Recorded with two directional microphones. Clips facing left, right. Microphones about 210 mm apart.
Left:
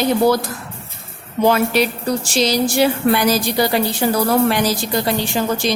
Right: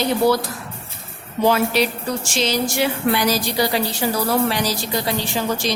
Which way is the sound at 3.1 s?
50° left (ahead or behind).